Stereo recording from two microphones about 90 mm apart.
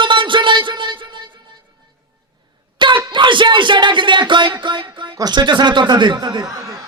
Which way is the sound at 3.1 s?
60° right (ahead or behind).